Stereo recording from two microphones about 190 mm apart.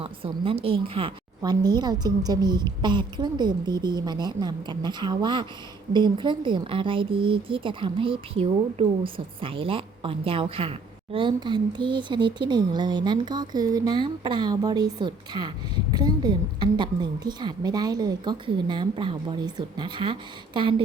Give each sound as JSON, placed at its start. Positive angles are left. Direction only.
{"t": 0.0, "sound": "a woman's voice", "side_deg": -30}